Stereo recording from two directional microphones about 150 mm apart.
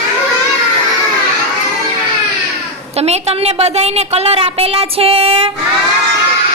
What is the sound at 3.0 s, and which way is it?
A woman's voice, 45° right (ahead or behind).